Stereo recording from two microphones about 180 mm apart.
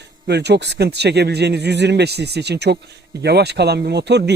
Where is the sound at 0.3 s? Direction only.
70° right (ahead or behind).